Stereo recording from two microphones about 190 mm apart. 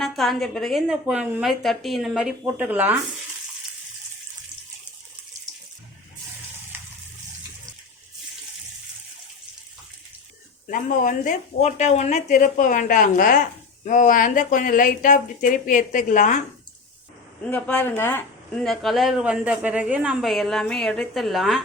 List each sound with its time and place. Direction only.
0.0 s speech: centre (ahead or behind)
10.7 s speech: 45° left (ahead or behind)
17.5 s speech: 10° left (ahead or behind)